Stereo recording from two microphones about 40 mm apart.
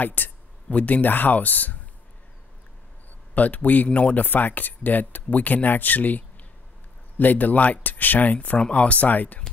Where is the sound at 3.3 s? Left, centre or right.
Left.